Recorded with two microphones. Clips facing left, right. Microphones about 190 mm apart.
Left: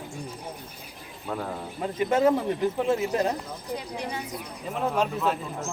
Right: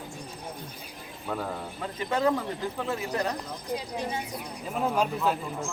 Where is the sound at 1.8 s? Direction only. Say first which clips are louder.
Left 5 dB; 20° left (ahead or behind).